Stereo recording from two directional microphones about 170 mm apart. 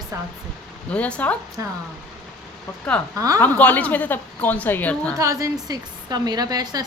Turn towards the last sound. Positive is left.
turn(degrees=-20)  # may be behind; listen again after turning